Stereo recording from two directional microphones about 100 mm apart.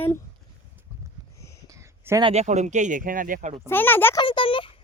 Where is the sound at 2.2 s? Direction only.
90° right.